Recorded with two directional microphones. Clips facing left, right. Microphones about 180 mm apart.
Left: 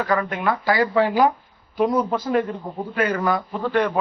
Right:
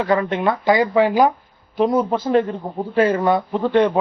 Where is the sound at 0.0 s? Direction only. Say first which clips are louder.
Right 4 dB; 25° right (ahead or behind).